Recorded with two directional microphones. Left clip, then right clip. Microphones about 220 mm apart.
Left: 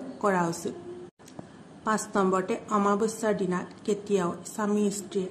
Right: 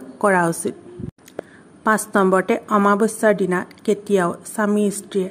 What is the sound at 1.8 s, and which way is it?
A woman's voice, 40° right (ahead or behind).